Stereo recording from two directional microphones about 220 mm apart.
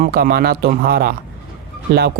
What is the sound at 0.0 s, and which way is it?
Speech, 45° right (ahead or behind).